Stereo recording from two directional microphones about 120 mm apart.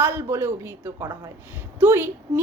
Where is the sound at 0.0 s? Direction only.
20° right (ahead or behind).